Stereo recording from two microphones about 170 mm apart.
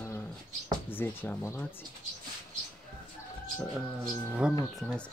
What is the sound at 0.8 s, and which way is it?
Speech, 10° left (ahead or behind).